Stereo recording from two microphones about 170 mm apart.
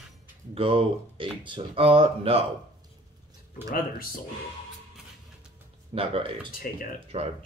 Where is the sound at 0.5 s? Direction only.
30° right (ahead or behind).